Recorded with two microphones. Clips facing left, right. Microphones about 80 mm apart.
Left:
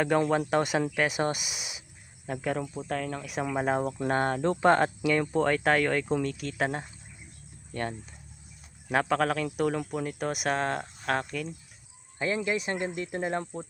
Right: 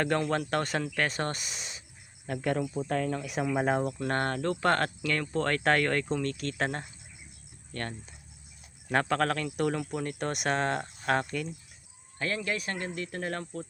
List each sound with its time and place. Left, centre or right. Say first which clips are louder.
0.2 s speech: left 4 dB; centre
3.9 s speech: left 3 dB; centre
12.2 s speech: left 3 dB; centre